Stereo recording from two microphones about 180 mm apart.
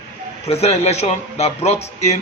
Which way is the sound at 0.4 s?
35° left (ahead or behind).